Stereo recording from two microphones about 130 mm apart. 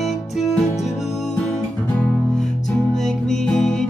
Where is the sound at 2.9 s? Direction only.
5° left (ahead or behind).